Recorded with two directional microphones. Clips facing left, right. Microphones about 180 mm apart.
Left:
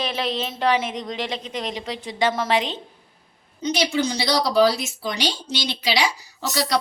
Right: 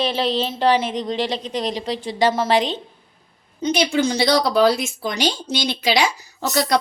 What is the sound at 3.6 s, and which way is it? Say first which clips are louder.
A woman's voice: right 3 dB; 55° right (ahead or behind).